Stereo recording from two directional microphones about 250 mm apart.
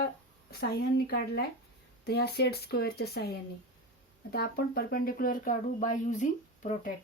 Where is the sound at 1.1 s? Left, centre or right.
Left.